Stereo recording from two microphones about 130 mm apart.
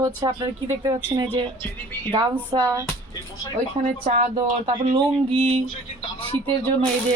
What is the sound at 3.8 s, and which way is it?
Speech, 75° right (ahead or behind).